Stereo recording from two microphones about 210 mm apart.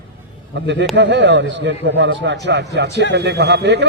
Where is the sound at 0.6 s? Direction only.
55° right (ahead or behind).